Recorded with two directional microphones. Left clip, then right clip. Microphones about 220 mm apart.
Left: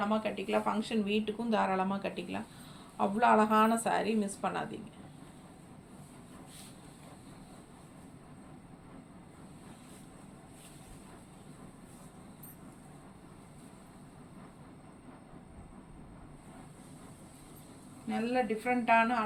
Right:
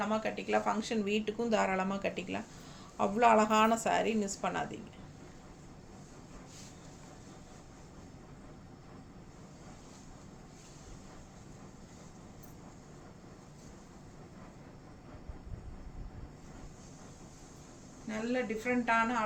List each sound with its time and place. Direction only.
0.1 s speech: 20° right (ahead or behind)
18.1 s speech: 15° right (ahead or behind)